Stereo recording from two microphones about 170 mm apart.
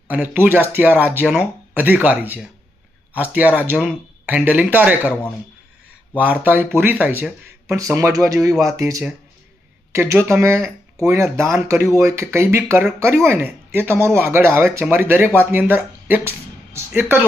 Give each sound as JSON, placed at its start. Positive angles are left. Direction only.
{"t": 0.1, "sound": "speech", "side_deg": -10}
{"t": 6.1, "sound": "speech", "side_deg": -10}